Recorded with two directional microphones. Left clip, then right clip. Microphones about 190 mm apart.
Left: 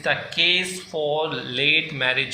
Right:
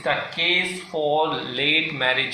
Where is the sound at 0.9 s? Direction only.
30° left (ahead or behind).